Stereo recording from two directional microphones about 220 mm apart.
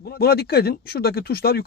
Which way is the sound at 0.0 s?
45° left (ahead or behind).